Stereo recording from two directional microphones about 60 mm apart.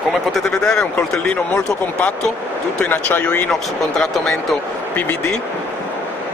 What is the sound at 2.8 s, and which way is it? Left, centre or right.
Speech, left.